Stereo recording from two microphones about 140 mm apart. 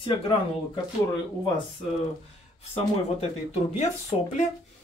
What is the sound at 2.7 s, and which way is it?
Speech, 50° left (ahead or behind).